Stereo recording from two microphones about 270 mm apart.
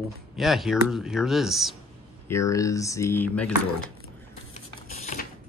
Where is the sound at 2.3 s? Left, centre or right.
Centre.